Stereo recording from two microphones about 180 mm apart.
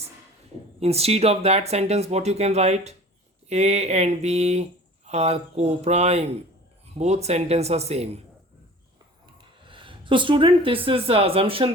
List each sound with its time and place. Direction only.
0.8 s speech: 35° right (ahead or behind)
9.4 s speech: 30° right (ahead or behind)